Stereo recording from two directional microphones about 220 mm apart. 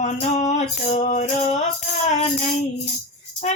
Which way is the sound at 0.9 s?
30° left (ahead or behind).